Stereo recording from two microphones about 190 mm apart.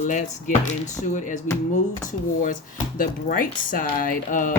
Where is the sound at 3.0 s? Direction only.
45° left (ahead or behind).